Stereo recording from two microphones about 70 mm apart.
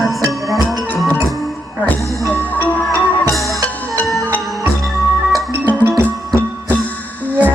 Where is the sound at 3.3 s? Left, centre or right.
Centre.